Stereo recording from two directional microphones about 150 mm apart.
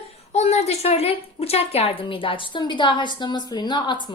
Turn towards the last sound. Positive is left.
turn(degrees=30)  # may be behind; listen again after turning